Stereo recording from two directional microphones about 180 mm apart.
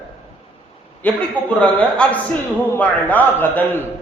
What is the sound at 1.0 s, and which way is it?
A man's voice, 10° left (ahead or behind).